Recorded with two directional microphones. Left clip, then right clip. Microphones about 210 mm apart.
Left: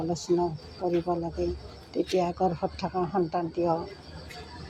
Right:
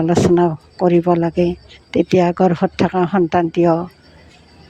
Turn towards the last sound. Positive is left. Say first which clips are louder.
# right 13 dB
turn(degrees=-50)  # may be behind; listen again after turning